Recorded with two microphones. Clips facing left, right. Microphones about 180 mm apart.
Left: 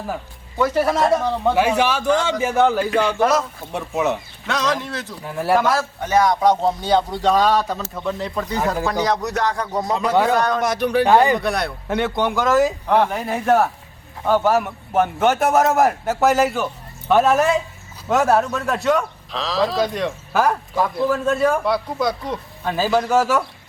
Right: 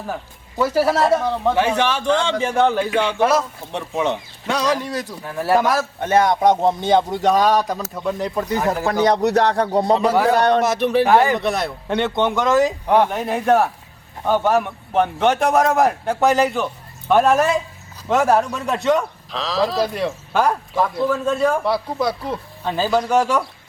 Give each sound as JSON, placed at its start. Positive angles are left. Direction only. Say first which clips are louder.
{"t": 0.6, "sound": "a man's voice", "louder": "right 1 dB", "side_deg": -5}
{"t": 1.5, "sound": "a man's voice", "louder": "left 1 dB", "side_deg": 10}
{"t": 3.2, "sound": "a man's voice", "louder": "right 2 dB", "side_deg": -5}
{"t": 3.7, "sound": "a man's voice", "louder": "left 1 dB", "side_deg": 10}
{"t": 4.4, "sound": "a man's voice", "louder": "right 2 dB", "side_deg": -10}
{"t": 5.2, "sound": "a man's voice", "louder": "left 1 dB", "side_deg": 10}
{"t": 5.5, "sound": "a man's voice", "louder": "right 1 dB", "side_deg": -15}
{"t": 6.0, "sound": "a man's voice", "louder": "right 1 dB", "side_deg": -25}
{"t": 9.0, "sound": "speech", "louder": "right 5 dB", "side_deg": -65}
{"t": 9.3, "sound": "speech", "louder": "right 5 dB", "side_deg": -35}
{"t": 10.6, "sound": "a man's voice", "louder": "right 1 dB", "side_deg": -5}
{"t": 20.3, "sound": "a man's voice", "louder": "even", "side_deg": 5}
{"t": 21.6, "sound": "a man's voice", "louder": "even", "side_deg": -5}
{"t": 22.6, "sound": "a man's voice", "louder": "even", "side_deg": 10}